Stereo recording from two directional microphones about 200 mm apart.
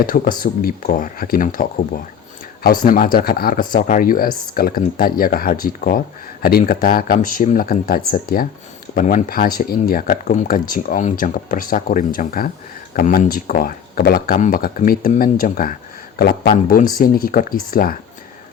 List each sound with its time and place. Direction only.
0.0 s speech: 45° left (ahead or behind)
2.6 s speech: 45° left (ahead or behind)